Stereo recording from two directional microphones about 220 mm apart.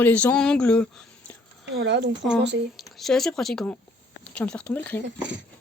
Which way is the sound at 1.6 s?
50° right (ahead or behind).